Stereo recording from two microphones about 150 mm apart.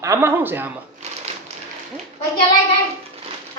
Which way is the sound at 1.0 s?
45° right (ahead or behind).